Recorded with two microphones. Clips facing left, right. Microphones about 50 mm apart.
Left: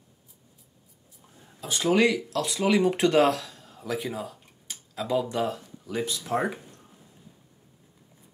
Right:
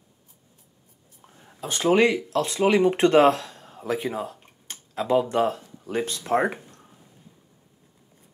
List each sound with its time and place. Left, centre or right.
1.2 s speech: right